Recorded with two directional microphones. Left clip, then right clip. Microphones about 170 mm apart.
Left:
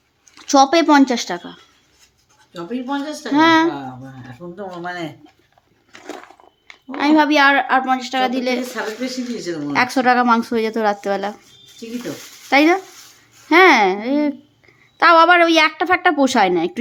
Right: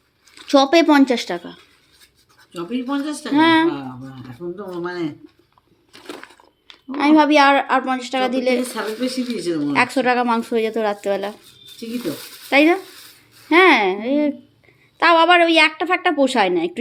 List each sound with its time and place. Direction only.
0.3 s speech: 10° left (ahead or behind)
2.6 s speech: 15° left (ahead or behind)
4.5 s speech: 65° left (ahead or behind)
6.9 s speech: 10° left (ahead or behind)
12.5 s speech: 20° left (ahead or behind)